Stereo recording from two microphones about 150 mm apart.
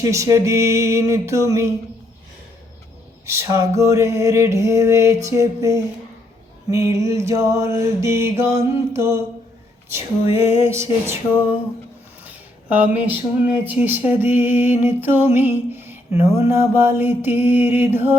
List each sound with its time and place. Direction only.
0.0 s music: 20° right (ahead or behind)
3.2 s music: 20° right (ahead or behind)
10.3 s speech: 15° right (ahead or behind)
12.2 s speech: 10° right (ahead or behind)